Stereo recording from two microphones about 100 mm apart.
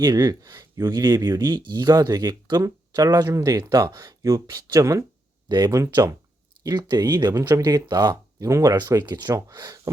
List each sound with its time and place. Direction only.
0.0 s speech: 45° right (ahead or behind)
4.0 s speech: 35° right (ahead or behind)
6.7 s speech: 45° right (ahead or behind)
7.2 s speech: 25° right (ahead or behind)